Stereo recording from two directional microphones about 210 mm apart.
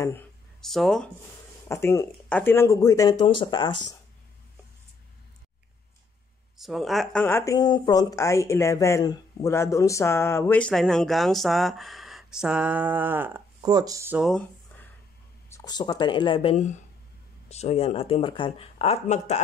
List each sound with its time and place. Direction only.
0.6 s speech: centre (ahead or behind)
1.7 s speech: 10° left (ahead or behind)
6.6 s speech: centre (ahead or behind)
15.5 s speech: 20° left (ahead or behind)